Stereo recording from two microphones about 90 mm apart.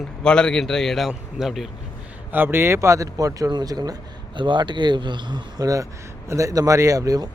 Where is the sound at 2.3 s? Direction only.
25° right (ahead or behind); by 3.9 s 45° right (ahead or behind).